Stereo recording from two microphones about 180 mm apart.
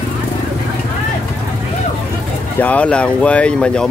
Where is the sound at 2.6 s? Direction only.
5° left (ahead or behind).